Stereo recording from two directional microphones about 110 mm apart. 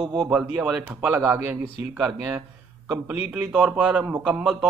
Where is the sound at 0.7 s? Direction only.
15° right (ahead or behind).